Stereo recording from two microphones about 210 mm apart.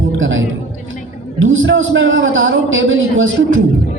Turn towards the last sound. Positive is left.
turn(degrees=-70)  # may be behind; listen again after turning